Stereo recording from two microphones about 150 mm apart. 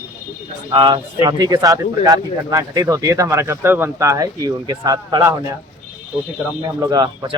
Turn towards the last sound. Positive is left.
turn(degrees=-25)  # may be behind; listen again after turning